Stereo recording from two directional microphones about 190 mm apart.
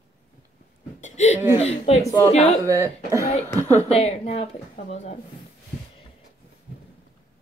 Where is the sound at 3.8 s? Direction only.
35° left (ahead or behind).